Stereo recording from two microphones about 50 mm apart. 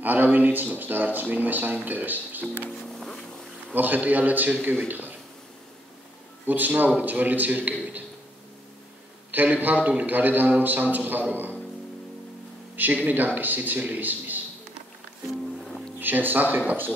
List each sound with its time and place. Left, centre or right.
0.0 s speech: right
3.7 s speech: right
6.4 s speech: right
9.3 s speech: right
12.7 s speech: right
16.0 s speech: right